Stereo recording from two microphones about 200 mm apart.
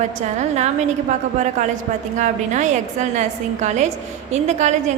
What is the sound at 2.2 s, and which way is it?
A woman's voice, 35° right (ahead or behind).